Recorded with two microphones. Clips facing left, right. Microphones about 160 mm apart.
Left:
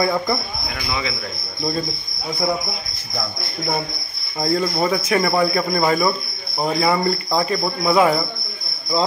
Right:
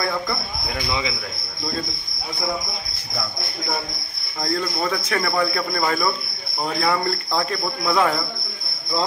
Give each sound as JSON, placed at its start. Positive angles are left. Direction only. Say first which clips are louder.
{"t": 0.0, "sound": "speech", "louder": "left 5 dB", "side_deg": 15}
{"t": 0.7, "sound": "speech", "louder": "right 1 dB", "side_deg": -20}
{"t": 4.4, "sound": "speech", "louder": "left 5 dB", "side_deg": 15}